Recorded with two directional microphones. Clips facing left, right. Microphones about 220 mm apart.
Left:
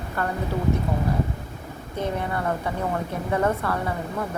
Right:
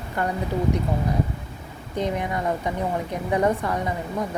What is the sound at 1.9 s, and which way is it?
A woman's voice, 15° right (ahead or behind).